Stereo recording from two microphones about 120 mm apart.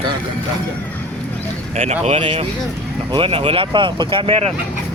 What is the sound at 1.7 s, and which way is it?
Speech, 65° right (ahead or behind).